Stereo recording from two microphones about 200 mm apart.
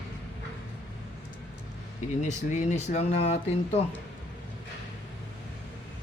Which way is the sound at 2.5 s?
35° left (ahead or behind).